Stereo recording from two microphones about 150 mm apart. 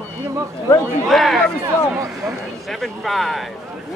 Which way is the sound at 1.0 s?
Centre (ahead or behind).